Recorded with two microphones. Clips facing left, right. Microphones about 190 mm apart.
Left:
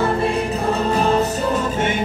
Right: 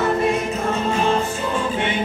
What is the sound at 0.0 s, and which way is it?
Music, 30° left (ahead or behind).